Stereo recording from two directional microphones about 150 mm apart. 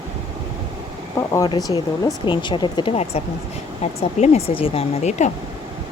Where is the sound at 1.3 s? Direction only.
25° left (ahead or behind); by 5.3 s 50° left (ahead or behind).